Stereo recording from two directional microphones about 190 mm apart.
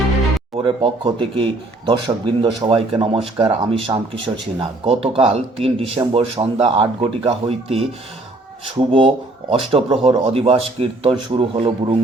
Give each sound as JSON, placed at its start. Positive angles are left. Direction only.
{"t": 0.6, "sound": "speech", "side_deg": -25}